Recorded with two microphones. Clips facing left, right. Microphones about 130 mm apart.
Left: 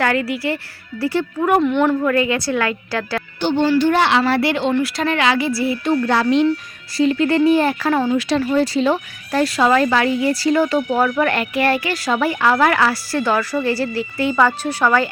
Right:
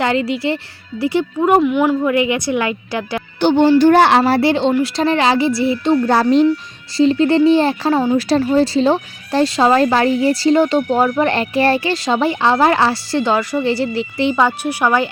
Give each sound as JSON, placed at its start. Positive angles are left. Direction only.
{"t": 0.0, "sound": "speech", "side_deg": -20}
{"t": 1.6, "sound": "a woman's voice", "side_deg": -5}
{"t": 2.0, "sound": "a woman's voice", "side_deg": -20}
{"t": 3.8, "sound": "speech", "side_deg": -45}
{"t": 4.4, "sound": "speech", "side_deg": -30}